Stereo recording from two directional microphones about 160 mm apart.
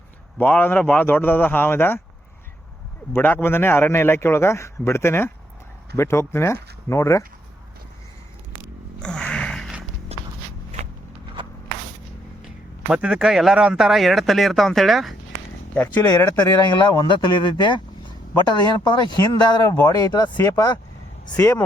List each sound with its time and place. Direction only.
0.3 s a man's voice: 10° left (ahead or behind)
3.1 s a man's voice: 10° left (ahead or behind)
9.0 s music: 5° left (ahead or behind)
10.1 s a sound: 40° right (ahead or behind)
12.5 s speech: 5° right (ahead or behind)
15.7 s a man's voice: 10° left (ahead or behind)
16.6 s speech: 25° left (ahead or behind)
18.9 s speech: 25° left (ahead or behind)